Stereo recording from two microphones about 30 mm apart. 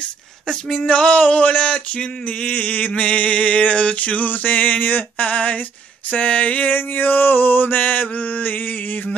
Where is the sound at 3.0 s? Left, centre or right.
Left.